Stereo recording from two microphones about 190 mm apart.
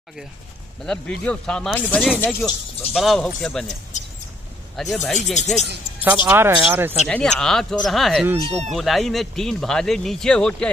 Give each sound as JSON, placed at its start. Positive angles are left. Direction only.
{"t": 0.8, "sound": "speech", "side_deg": 5}
{"t": 4.7, "sound": "speech", "side_deg": 0}
{"t": 6.0, "sound": "speech", "side_deg": -10}
{"t": 7.1, "sound": "speech", "side_deg": 5}
{"t": 8.4, "sound": "speech", "side_deg": -30}
{"t": 8.6, "sound": "speech", "side_deg": 0}